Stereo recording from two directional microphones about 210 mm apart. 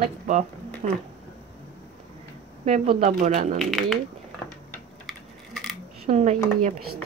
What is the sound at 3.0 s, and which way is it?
Speech, 35° right (ahead or behind).